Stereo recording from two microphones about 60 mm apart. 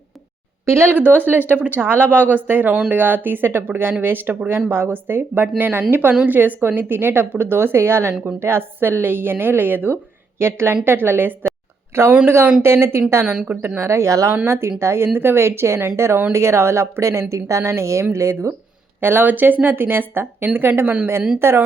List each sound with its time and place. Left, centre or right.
0.6 s speech: right
0.9 s a woman's voice: right
13.2 s a woman's voice: right
13.7 s speech: right
18.9 s a woman's voice: right